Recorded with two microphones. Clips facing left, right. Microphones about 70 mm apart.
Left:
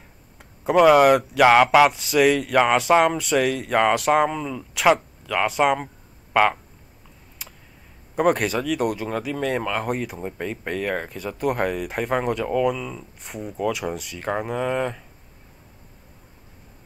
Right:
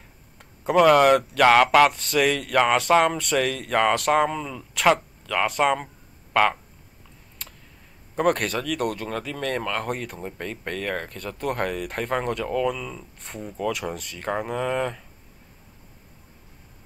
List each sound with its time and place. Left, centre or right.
0.4 s speech: centre
7.4 s tick: centre
8.2 s speech: centre